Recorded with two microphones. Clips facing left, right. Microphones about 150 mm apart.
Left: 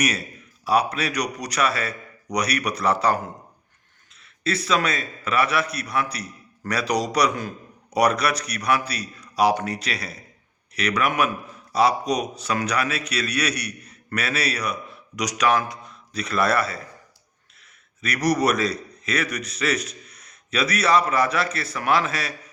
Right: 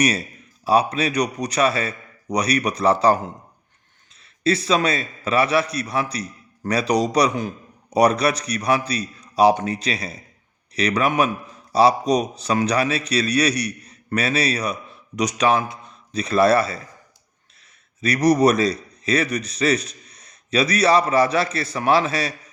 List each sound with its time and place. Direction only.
0.6 s a man's voice: 25° right (ahead or behind)
4.2 s a man's voice: 30° right (ahead or behind)
18.0 s a man's voice: 30° right (ahead or behind)